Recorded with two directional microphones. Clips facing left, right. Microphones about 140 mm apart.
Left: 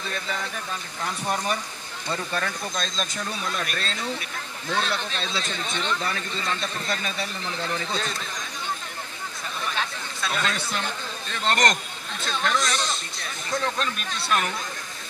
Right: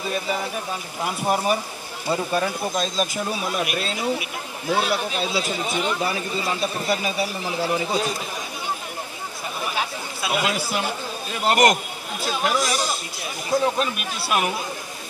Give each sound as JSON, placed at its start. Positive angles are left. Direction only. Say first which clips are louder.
{"t": 0.0, "sound": "speech", "louder": "right 6 dB", "side_deg": -15}
{"t": 9.6, "sound": "speech", "louder": "right 3 dB", "side_deg": -10}